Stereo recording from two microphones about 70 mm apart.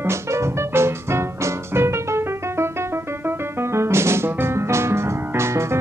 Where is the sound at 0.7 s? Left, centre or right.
Right.